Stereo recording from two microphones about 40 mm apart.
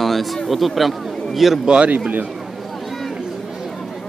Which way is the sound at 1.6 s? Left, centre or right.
Right.